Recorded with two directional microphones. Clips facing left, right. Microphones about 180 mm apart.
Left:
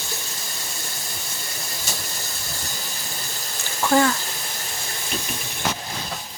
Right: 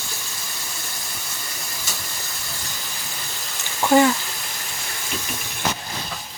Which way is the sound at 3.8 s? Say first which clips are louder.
Right 3 dB; 15° right (ahead or behind).